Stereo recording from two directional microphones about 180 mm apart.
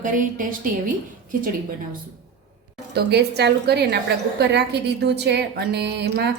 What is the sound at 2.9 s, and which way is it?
A woman's voice, 65° right (ahead or behind).